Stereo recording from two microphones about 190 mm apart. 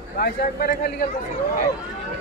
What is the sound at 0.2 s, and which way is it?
Speech, 55° left (ahead or behind).